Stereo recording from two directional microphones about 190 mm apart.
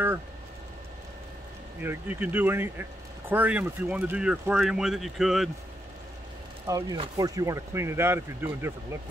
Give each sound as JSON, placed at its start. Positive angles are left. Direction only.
{"t": 1.8, "sound": "speech", "side_deg": -10}
{"t": 6.6, "sound": "speech", "side_deg": -15}